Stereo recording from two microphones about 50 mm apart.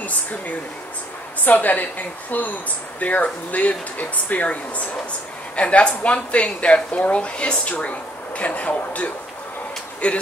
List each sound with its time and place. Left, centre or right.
0.0 s speech: left